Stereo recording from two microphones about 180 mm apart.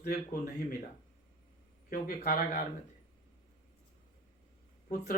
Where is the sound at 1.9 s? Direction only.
55° left (ahead or behind).